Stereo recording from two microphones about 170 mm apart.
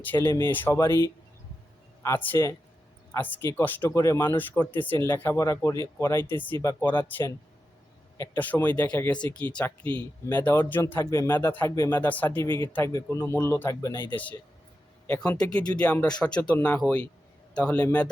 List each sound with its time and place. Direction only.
0.0 s speech: 10° left (ahead or behind)
8.2 s speech: 15° left (ahead or behind)
13.9 s speech: 25° right (ahead or behind)
15.3 s speech: 5° left (ahead or behind)